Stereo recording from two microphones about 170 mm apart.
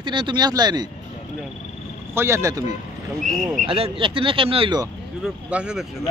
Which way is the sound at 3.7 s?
30° right (ahead or behind).